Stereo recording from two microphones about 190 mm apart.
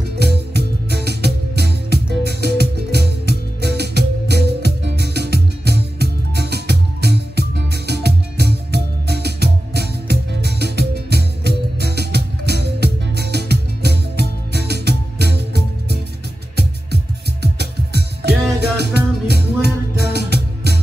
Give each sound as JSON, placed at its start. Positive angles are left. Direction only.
{"t": 0.2, "sound": "music", "side_deg": -60}